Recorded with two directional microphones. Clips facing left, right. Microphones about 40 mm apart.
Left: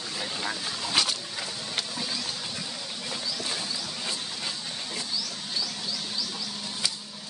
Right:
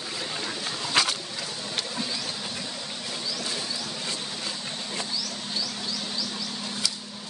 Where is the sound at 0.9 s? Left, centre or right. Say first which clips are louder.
Right 2 dB; right.